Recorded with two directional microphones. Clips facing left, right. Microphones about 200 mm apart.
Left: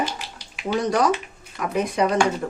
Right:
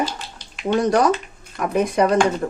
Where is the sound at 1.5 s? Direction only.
50° right (ahead or behind).